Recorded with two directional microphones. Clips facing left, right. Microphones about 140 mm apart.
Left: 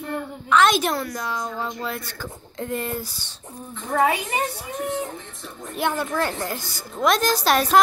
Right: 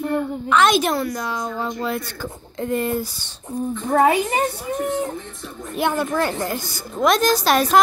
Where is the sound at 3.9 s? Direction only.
45° right (ahead or behind).